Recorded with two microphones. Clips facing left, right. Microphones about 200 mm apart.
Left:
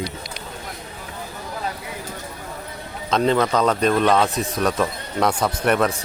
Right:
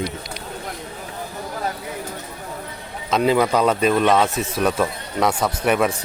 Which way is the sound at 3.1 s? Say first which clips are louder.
Right 1 dB; 5° right (ahead or behind).